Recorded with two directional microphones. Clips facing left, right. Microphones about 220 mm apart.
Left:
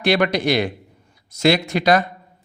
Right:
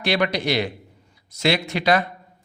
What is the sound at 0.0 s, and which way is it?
A man's voice, 50° left (ahead or behind).